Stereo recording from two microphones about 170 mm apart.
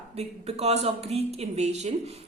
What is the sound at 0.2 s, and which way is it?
A woman's voice, 40° right (ahead or behind).